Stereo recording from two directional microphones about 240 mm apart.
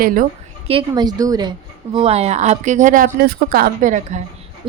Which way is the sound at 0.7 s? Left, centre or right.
Centre.